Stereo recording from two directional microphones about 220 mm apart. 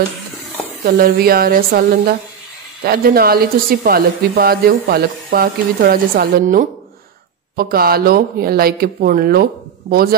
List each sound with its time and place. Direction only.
0.8 s speech: 45° right (ahead or behind)